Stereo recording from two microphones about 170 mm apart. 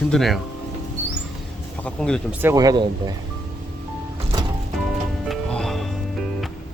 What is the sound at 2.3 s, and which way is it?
Speech, 10° right (ahead or behind).